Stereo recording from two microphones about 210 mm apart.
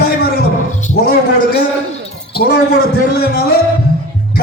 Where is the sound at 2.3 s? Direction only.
50° left (ahead or behind).